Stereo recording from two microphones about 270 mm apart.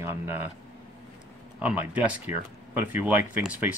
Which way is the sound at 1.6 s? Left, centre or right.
Centre.